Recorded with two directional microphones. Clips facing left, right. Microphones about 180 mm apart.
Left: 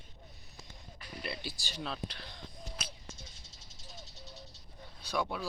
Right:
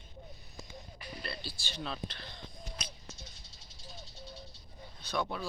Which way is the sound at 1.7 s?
5° left (ahead or behind).